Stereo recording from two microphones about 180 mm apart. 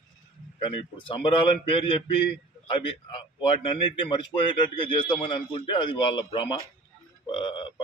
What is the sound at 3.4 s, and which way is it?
A man's voice, 30° left (ahead or behind).